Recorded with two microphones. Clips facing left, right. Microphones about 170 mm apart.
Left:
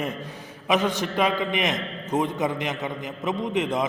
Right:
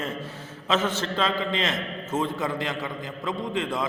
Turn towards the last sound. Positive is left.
turn(degrees=20)  # may be behind; listen again after turning